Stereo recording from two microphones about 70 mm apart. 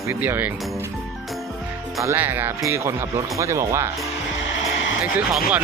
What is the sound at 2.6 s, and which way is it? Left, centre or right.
Speech, right.